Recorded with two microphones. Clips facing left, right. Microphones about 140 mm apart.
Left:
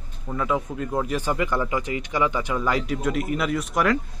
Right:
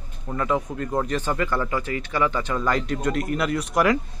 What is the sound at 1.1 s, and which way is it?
Speech, 15° left (ahead or behind).